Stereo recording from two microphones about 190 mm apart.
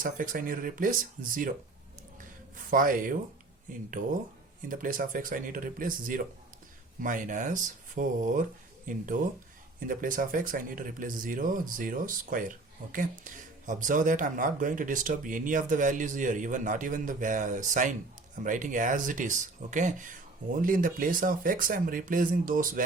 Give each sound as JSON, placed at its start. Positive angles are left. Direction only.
{"t": 0.0, "sound": "speech", "side_deg": -45}
{"t": 2.6, "sound": "speech", "side_deg": -45}